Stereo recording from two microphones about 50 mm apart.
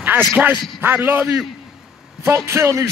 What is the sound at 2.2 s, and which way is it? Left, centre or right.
Speech, right.